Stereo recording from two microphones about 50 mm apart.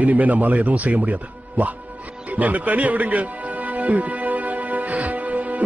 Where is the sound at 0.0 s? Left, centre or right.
Right.